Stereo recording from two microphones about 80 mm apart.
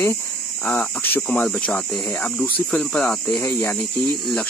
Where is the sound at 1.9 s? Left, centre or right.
Centre.